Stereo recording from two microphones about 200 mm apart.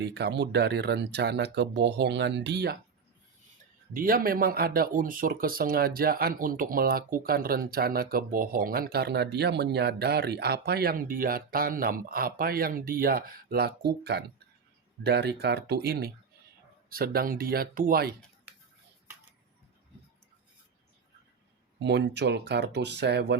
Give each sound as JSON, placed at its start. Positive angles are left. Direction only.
{"t": 0.0, "sound": "speech", "side_deg": -55}
{"t": 3.9, "sound": "speech", "side_deg": -45}
{"t": 21.8, "sound": "speech", "side_deg": -60}